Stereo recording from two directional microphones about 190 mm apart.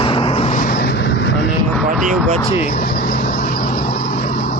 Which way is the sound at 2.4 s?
30° left (ahead or behind).